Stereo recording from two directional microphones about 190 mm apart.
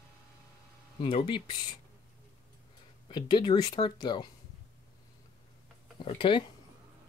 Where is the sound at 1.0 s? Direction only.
25° left (ahead or behind).